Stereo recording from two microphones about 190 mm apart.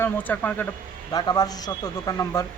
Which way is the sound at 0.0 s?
10° left (ahead or behind).